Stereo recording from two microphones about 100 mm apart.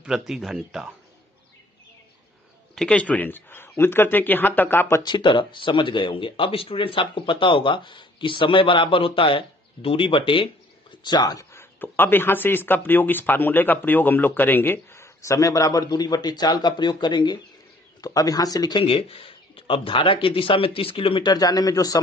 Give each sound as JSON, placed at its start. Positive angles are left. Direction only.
{"t": 0.0, "sound": "speech", "side_deg": -5}
{"t": 2.7, "sound": "speech", "side_deg": 10}
{"t": 5.0, "sound": "speech", "side_deg": 50}
{"t": 11.1, "sound": "speech", "side_deg": 40}
{"t": 11.5, "sound": "speech", "side_deg": 20}
{"t": 18.0, "sound": "speech", "side_deg": 40}
{"t": 18.8, "sound": "speech", "side_deg": 65}
{"t": 21.3, "sound": "speech", "side_deg": 40}